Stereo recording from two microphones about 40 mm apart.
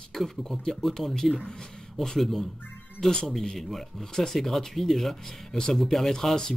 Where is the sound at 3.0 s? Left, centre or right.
Centre.